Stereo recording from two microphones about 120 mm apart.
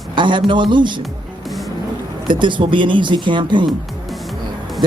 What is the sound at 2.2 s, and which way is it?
Speech, 40° right (ahead or behind).